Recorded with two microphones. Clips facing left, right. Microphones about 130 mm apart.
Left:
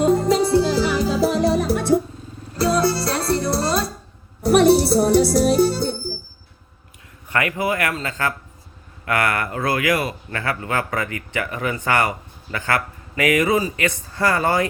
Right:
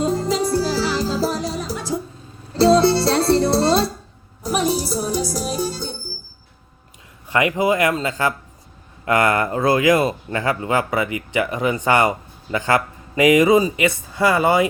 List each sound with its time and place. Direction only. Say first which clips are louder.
0.0 s music: left 3 dB; 60° left (ahead or behind)
2.6 s music: right 5 dB; 25° right (ahead or behind)
4.4 s music: left 7 dB; 65° left (ahead or behind)
7.3 s a man's voice: right 4 dB; 20° right (ahead or behind)